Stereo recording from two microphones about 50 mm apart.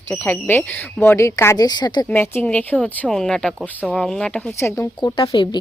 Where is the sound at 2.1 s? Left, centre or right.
Left.